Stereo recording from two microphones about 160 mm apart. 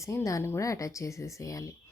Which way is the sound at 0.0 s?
20° left (ahead or behind).